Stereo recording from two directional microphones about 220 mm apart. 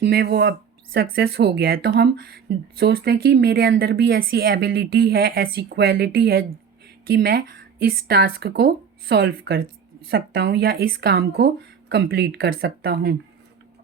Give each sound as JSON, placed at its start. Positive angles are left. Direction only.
{"t": 0.0, "sound": "speech", "side_deg": -45}